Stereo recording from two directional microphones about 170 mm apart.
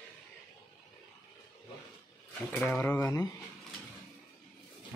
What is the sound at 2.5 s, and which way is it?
Speech, 10° left (ahead or behind).